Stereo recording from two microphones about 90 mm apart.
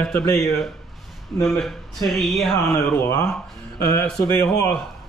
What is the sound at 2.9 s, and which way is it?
Speech, 30° left (ahead or behind).